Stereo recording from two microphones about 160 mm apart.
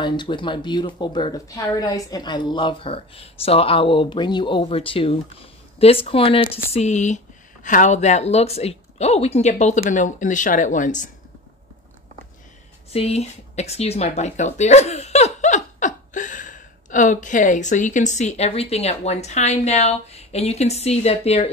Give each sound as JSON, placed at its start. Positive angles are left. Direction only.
{"t": 0.0, "sound": "a woman's voice", "side_deg": 30}
{"t": 12.9, "sound": "speech", "side_deg": 40}